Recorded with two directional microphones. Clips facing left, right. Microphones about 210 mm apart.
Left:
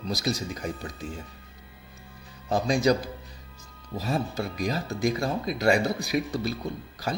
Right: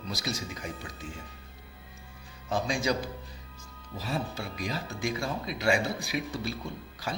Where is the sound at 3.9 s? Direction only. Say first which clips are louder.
Left 5 dB; 45° left (ahead or behind).